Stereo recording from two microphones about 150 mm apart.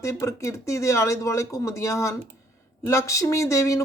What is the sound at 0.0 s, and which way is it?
Speech, 20° left (ahead or behind).